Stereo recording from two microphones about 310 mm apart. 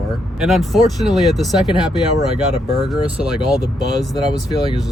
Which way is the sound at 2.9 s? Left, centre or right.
Centre.